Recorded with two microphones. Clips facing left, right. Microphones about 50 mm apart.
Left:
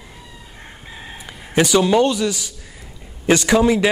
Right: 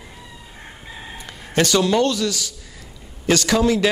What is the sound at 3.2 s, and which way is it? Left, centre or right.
Speech, left.